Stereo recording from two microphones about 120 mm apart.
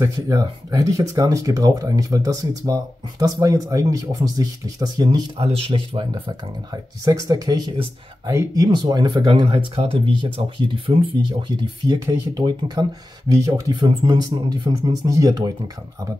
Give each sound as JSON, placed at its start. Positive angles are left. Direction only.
{"t": 0.0, "sound": "speech", "side_deg": -30}
{"t": 5.4, "sound": "speech", "side_deg": -50}
{"t": 7.1, "sound": "speech", "side_deg": -30}